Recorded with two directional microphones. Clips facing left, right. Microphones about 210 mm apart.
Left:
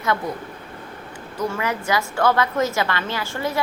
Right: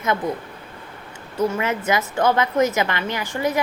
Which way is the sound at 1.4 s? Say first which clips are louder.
Right 3 dB; 20° right (ahead or behind).